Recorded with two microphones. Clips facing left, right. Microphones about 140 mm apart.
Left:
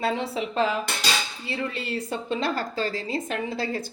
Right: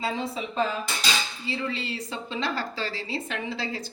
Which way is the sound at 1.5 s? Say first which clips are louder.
Left 1 dB; 50° left (ahead or behind).